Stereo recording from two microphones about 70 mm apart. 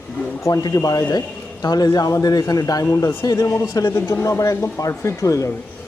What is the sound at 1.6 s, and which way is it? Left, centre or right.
Speech, left.